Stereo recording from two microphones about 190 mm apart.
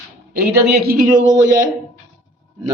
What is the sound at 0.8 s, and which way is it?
Speech, 55° right (ahead or behind).